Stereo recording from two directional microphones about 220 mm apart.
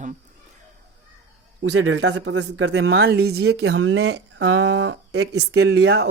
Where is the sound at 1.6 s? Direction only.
60° right (ahead or behind).